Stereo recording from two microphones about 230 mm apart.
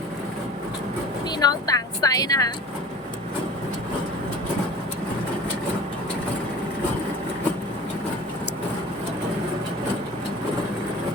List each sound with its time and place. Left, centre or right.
1.4 s a woman's voice: centre